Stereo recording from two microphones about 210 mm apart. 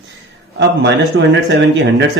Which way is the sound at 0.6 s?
55° right (ahead or behind).